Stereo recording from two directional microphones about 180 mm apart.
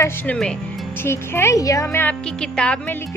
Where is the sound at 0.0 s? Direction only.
5° left (ahead or behind).